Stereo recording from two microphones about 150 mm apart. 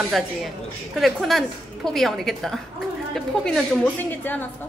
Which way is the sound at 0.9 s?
Centre (ahead or behind).